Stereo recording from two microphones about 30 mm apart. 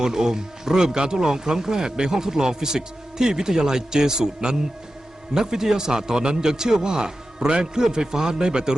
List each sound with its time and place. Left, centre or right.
0.0 s speech: centre